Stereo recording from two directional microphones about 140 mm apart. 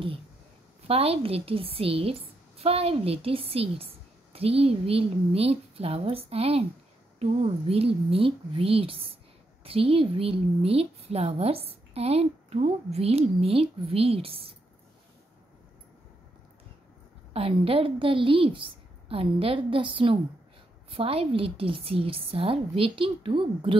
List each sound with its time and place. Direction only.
0.8 s a woman's voice: 45° right (ahead or behind)
17.3 s a woman's voice: 45° right (ahead or behind)